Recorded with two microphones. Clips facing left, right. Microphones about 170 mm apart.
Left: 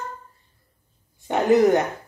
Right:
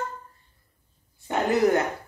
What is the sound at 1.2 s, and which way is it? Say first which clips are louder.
Speech: left 5 dB; 20° left (ahead or behind).